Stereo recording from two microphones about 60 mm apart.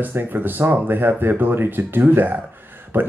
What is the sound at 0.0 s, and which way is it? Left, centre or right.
Speech, right.